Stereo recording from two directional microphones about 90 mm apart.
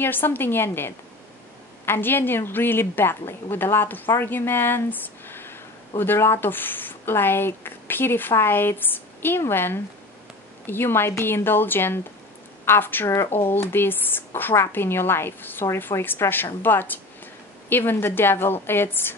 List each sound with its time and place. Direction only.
0.0 s a woman's voice: 25° left (ahead or behind)